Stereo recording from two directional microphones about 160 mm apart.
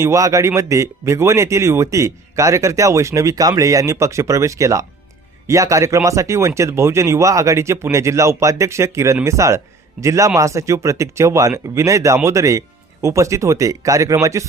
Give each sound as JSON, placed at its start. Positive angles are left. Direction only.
{"t": 0.0, "sound": "speech", "side_deg": -20}